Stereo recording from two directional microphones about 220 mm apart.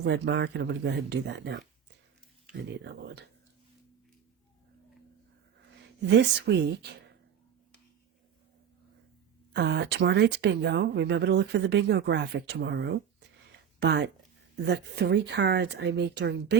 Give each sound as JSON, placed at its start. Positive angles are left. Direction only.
{"t": 0.0, "sound": "speech", "side_deg": -50}
{"t": 5.8, "sound": "speech", "side_deg": -50}
{"t": 9.5, "sound": "speech", "side_deg": -50}